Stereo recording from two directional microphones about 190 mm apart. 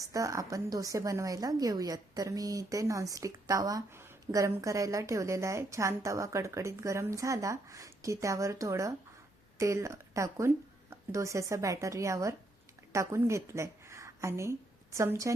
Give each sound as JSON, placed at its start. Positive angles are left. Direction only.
{"t": 0.0, "sound": "a woman's voice", "side_deg": -15}